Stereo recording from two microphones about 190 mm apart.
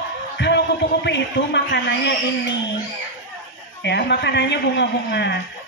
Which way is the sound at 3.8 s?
65° left (ahead or behind).